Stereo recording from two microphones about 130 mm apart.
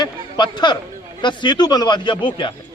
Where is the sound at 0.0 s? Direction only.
35° left (ahead or behind).